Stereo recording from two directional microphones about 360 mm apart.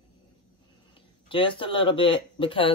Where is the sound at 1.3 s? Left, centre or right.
Centre.